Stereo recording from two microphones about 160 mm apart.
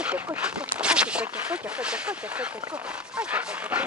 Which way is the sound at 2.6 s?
20° right (ahead or behind).